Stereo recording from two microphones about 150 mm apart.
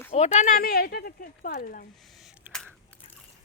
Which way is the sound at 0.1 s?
50° left (ahead or behind).